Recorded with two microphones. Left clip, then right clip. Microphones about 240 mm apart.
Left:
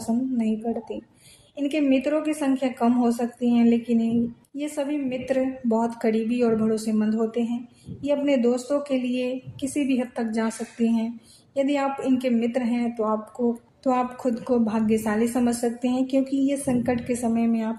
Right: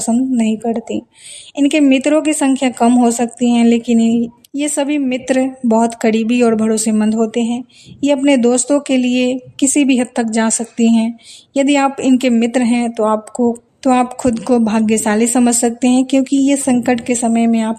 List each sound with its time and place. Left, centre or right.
0.1 s speech: right